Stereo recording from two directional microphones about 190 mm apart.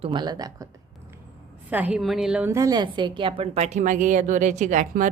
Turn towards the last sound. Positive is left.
turn(degrees=-40)  # may be behind; listen again after turning